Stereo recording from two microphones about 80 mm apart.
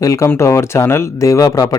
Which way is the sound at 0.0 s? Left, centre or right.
Left.